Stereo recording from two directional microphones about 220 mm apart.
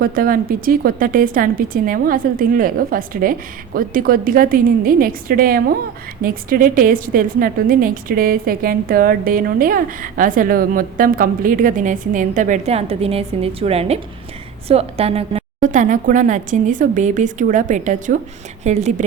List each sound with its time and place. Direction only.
0.0 s a woman's voice: 40° right (ahead or behind)